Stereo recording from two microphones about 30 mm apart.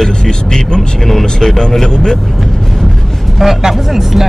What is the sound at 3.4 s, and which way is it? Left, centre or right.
Speech, centre.